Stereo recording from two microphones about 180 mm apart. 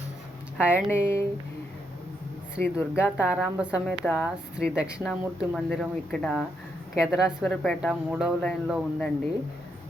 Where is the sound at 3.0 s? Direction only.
5° right (ahead or behind).